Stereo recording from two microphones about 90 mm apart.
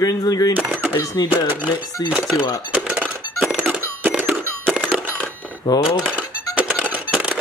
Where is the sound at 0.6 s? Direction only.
15° right (ahead or behind).